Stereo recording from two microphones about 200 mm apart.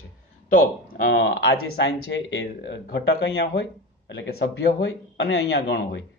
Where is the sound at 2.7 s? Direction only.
60° left (ahead or behind).